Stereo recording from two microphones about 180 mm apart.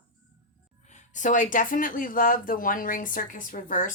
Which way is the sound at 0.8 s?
40° left (ahead or behind).